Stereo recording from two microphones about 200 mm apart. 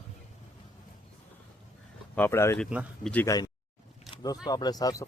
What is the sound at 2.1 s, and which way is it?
Speech, 10° left (ahead or behind).